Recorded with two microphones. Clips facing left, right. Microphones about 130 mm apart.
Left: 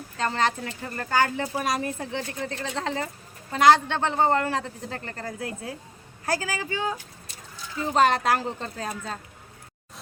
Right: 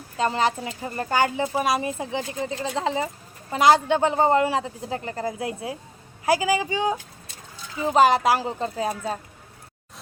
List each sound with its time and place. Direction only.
0.2 s a man's voice: 10° right (ahead or behind)
7.9 s a man's voice: 5° right (ahead or behind)